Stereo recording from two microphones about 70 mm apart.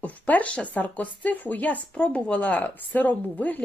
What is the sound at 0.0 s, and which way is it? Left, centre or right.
Speech, left.